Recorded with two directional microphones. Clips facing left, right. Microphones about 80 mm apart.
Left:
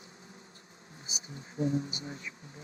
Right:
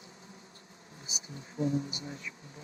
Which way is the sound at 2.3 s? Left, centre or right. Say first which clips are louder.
Even; centre.